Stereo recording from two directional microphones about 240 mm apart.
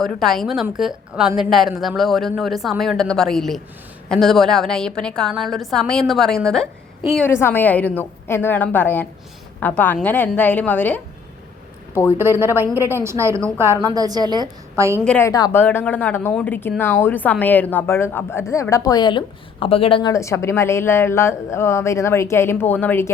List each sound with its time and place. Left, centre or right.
0.2 s a woman's voice: centre
12.1 s a woman's voice: centre
15.0 s a woman's voice: centre